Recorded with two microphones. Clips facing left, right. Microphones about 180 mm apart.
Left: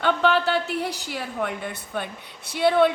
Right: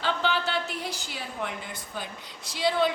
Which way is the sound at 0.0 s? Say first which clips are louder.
Left 7 dB; 60° left (ahead or behind).